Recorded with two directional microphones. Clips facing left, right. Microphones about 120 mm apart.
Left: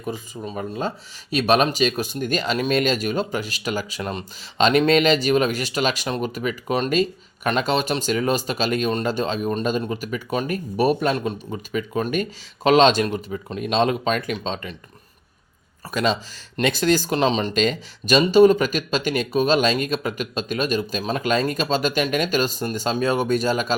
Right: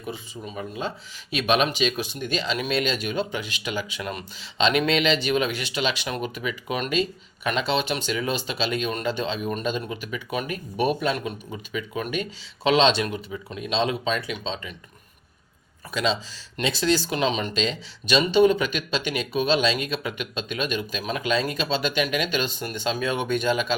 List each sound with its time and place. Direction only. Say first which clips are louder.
0.0 s speech: left 5 dB; 40° left (ahead or behind)
15.9 s speech: left 3 dB; 45° left (ahead or behind)
17.5 s speech: left 5 dB; 50° left (ahead or behind)